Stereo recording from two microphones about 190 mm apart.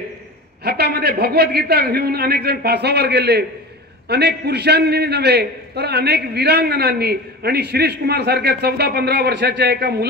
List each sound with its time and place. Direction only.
0.7 s a man's voice: 55° right (ahead or behind)